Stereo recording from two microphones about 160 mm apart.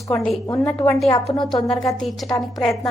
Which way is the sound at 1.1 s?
25° left (ahead or behind).